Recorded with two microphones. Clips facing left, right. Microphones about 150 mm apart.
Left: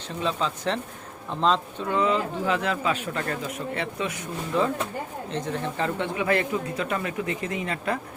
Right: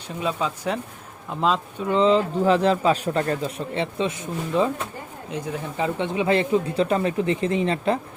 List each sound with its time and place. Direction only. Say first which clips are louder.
0.2 s speech: right 1 dB; 10° right (ahead or behind)
1.9 s speech: right 5 dB; 25° right (ahead or behind)
5.3 s speech: right 1 dB; 10° right (ahead or behind); by 7.9 s 30° right (ahead or behind)